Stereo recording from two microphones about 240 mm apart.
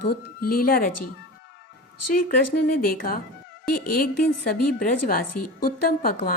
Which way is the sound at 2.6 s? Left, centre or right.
Left.